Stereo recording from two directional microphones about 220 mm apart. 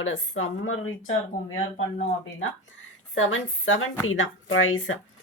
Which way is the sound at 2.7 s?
60° left (ahead or behind).